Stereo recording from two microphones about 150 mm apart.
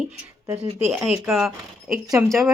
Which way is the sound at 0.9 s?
5° right (ahead or behind).